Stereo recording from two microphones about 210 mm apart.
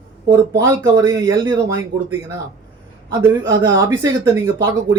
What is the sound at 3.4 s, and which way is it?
Speech, 65° right (ahead or behind).